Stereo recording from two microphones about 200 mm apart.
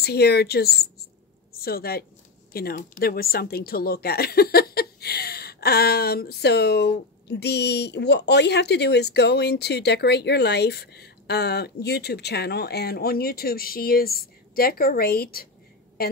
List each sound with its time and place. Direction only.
0.0 s a woman's voice: 55° left (ahead or behind)